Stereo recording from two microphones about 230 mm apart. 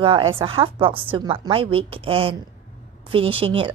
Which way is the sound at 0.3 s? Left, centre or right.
Right.